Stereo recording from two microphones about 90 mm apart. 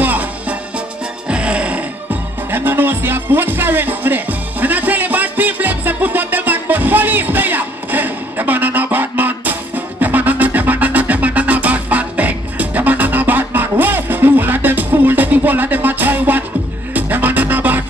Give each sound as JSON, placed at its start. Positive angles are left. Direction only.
{"t": 0.0, "sound": "music", "side_deg": -20}